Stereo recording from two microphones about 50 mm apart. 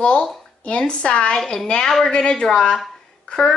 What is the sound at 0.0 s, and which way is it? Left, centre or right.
A woman's voice, centre.